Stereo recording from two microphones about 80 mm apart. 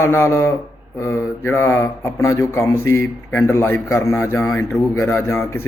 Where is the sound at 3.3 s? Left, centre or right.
Left.